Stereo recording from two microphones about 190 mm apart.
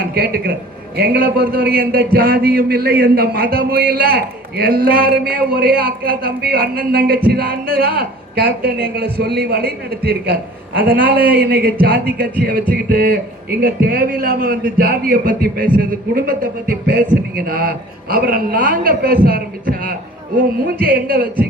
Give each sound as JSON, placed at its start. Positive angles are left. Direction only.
{"t": 0.0, "sound": "a man's voice", "side_deg": -55}